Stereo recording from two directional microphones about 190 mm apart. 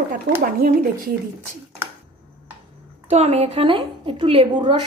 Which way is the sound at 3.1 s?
35° right (ahead or behind).